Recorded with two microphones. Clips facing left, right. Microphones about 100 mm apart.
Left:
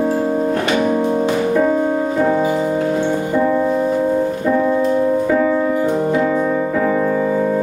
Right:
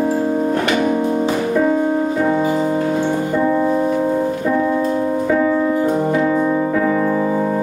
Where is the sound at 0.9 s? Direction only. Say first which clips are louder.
Left 1 dB; 15° left (ahead or behind).